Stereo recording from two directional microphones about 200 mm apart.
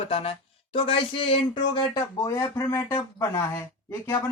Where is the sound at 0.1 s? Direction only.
30° left (ahead or behind).